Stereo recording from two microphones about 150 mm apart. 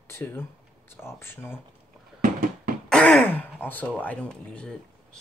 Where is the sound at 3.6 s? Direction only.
10° left (ahead or behind).